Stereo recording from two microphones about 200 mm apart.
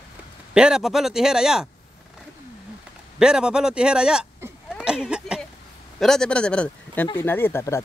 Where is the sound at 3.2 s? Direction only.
5° right (ahead or behind).